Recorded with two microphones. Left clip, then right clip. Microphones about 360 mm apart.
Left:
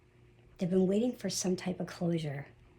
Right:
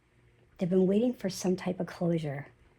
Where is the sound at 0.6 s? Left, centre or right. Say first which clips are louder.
Right 3 dB; centre.